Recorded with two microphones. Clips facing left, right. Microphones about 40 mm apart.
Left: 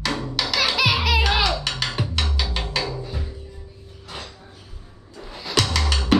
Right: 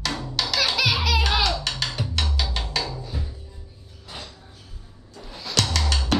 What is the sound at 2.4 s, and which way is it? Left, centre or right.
Music, centre.